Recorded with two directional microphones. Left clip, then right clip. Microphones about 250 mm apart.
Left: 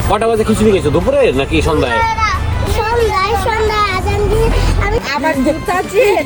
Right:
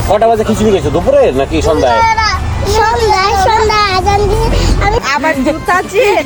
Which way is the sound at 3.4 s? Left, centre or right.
Centre.